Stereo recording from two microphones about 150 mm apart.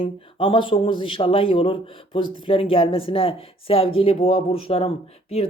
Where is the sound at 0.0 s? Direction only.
35° left (ahead or behind).